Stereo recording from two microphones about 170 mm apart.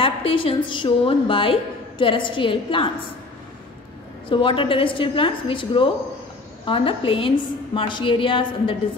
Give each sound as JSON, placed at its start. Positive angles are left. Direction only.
{"t": 0.0, "sound": "a woman's voice", "side_deg": 30}
{"t": 4.3, "sound": "a woman's voice", "side_deg": 30}